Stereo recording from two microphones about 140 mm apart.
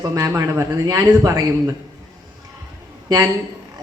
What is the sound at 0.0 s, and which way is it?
Speech, 25° right (ahead or behind).